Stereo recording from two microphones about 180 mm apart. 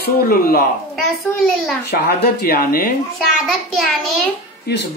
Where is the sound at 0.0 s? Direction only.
55° left (ahead or behind).